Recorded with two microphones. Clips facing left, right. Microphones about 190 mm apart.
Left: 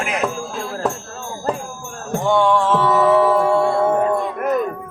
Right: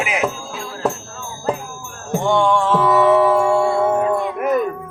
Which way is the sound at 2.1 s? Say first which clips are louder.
Even; centre (ahead or behind).